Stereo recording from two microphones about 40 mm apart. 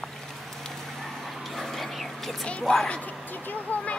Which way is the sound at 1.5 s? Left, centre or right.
Centre.